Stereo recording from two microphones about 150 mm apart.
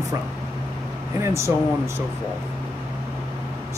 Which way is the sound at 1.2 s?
20° right (ahead or behind).